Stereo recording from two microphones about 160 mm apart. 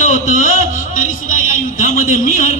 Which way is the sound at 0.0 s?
50° left (ahead or behind).